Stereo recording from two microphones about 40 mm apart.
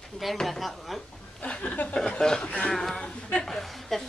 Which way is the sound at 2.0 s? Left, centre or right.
Centre.